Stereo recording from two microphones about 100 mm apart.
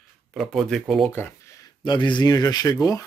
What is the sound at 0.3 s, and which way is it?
Speech, centre (ahead or behind).